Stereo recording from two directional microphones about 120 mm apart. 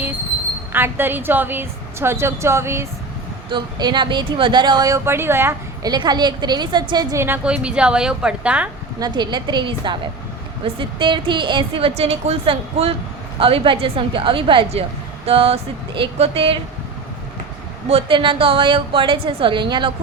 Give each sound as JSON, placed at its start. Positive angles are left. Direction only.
{"t": 0.7, "sound": "a woman's voice", "side_deg": -20}
{"t": 3.5, "sound": "speech", "side_deg": -40}
{"t": 5.0, "sound": "speech", "side_deg": -20}
{"t": 5.9, "sound": "speech", "side_deg": -35}
{"t": 7.4, "sound": "a woman's voice", "side_deg": -10}
{"t": 9.0, "sound": "a woman's voice", "side_deg": -35}
{"t": 17.8, "sound": "a woman's voice", "side_deg": -50}